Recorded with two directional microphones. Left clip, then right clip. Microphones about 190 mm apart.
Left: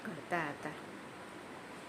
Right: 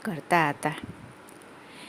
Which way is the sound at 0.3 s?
55° right (ahead or behind).